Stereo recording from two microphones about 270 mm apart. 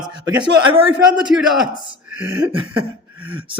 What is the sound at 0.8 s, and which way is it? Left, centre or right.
Speech, centre.